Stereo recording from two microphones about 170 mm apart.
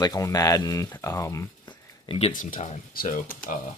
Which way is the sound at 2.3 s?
50° left (ahead or behind).